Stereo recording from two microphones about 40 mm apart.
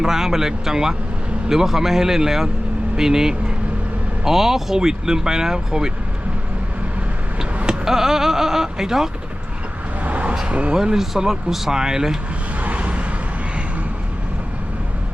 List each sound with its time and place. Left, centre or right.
0.0 s speech: centre
7.9 s speech: centre
10.0 s vehicle: right
10.4 s speech: right
10.9 s speech: centre
12.6 s vehicle: right